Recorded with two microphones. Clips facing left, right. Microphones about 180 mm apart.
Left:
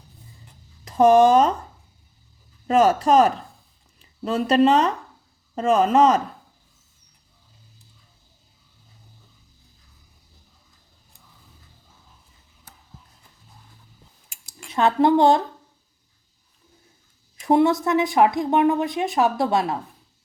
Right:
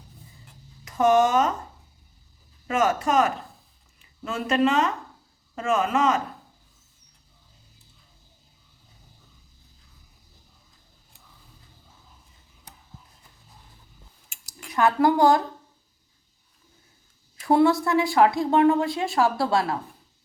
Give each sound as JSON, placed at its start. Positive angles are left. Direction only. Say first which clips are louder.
{"t": 0.9, "sound": "speech", "louder": "left 5 dB", "side_deg": 35}
{"t": 2.6, "sound": "speech", "louder": "left 6 dB", "side_deg": 35}
{"t": 14.4, "sound": "speech", "louder": "left 1 dB", "side_deg": 25}
{"t": 17.4, "sound": "speech", "louder": "left 1 dB", "side_deg": 20}